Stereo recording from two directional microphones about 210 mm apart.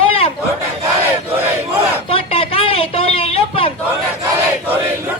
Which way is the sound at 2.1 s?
25° left (ahead or behind).